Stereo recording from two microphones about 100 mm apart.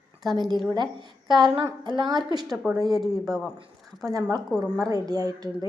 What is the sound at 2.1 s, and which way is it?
Speech, 45° right (ahead or behind).